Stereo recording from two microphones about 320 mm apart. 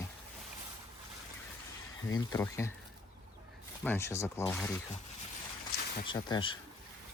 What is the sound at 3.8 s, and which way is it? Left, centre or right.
Speech, centre.